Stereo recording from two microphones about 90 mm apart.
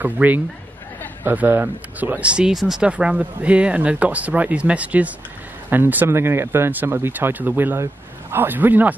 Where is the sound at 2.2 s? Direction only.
10° right (ahead or behind).